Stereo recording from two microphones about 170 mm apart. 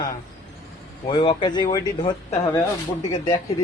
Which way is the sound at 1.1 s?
25° left (ahead or behind).